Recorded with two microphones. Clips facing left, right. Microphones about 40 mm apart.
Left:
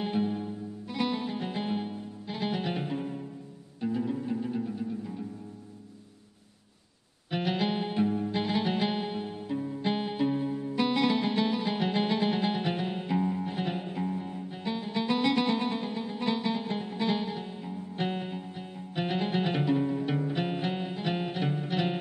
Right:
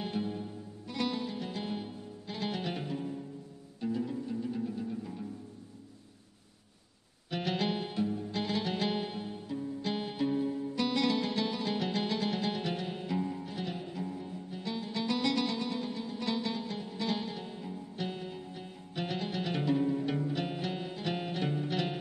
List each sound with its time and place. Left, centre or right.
0.0 s music: centre
3.8 s pizzicato: centre
4.2 s music: left; by 5.2 s centre
7.2 s music: centre
8.0 s music: left; by 17.7 s centre
17.9 s music: left
18.5 s music: centre
19.6 s music: centre